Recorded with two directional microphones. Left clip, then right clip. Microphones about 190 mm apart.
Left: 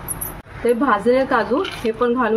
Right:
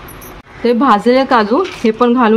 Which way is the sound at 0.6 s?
55° right (ahead or behind).